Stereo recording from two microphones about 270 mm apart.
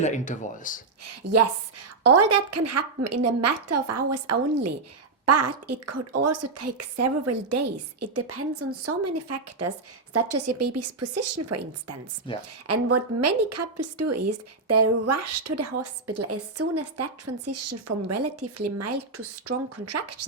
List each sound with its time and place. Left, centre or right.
0.0 s speech: left
1.0 s a woman's voice: right
12.3 s speech: centre
12.6 s a woman's voice: right